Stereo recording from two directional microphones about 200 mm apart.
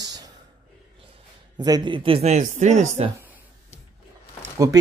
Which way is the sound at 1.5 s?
20° right (ahead or behind).